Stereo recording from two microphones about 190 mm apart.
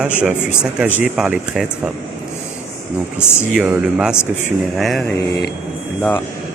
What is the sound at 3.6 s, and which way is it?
Speech, 5° right (ahead or behind).